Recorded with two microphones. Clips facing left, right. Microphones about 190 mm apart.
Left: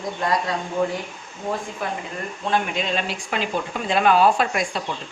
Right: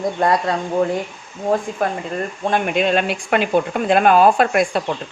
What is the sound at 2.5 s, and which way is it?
A woman's voice, 60° right (ahead or behind).